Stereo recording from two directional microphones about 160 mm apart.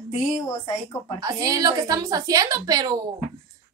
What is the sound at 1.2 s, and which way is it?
A woman's voice, 20° right (ahead or behind).